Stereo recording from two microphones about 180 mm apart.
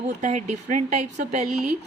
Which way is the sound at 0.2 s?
40° right (ahead or behind).